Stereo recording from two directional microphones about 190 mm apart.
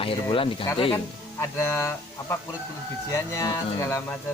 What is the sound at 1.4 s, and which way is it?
Speech, 15° left (ahead or behind).